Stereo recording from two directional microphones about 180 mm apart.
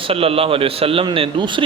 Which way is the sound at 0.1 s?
30° right (ahead or behind).